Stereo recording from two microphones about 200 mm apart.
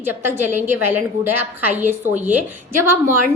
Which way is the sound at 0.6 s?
10° right (ahead or behind).